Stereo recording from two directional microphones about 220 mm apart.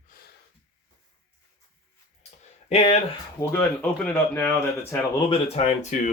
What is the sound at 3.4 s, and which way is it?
Speech, 10° left (ahead or behind).